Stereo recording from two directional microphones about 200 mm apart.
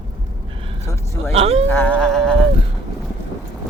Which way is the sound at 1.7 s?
10° left (ahead or behind).